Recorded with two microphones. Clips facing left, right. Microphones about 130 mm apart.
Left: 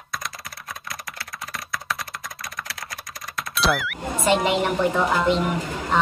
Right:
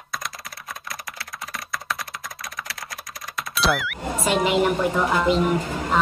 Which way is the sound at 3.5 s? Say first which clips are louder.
Even; centre (ahead or behind).